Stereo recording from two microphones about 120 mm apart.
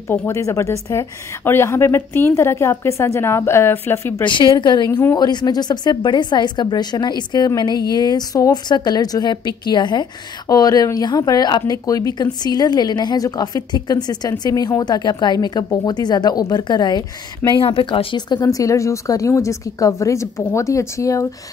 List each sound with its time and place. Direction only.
0.1 s a woman's voice: 25° left (ahead or behind)
4.3 s speech: 40° left (ahead or behind)
17.5 s a woman's voice: 45° left (ahead or behind); by 21.3 s 25° left (ahead or behind)